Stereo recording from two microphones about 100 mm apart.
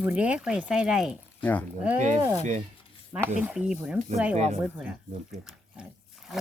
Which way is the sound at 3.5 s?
10° right (ahead or behind).